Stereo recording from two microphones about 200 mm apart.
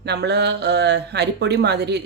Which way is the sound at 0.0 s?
55° right (ahead or behind).